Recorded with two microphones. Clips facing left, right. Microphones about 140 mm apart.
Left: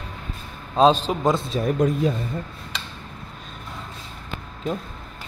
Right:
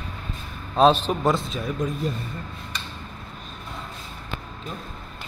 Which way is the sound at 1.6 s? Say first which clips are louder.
Left 6 dB; 70° left (ahead or behind).